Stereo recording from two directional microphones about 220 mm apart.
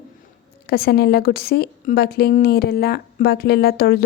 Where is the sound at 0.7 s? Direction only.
45° left (ahead or behind).